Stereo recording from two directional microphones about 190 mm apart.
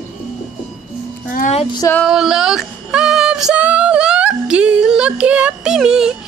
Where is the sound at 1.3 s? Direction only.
35° left (ahead or behind).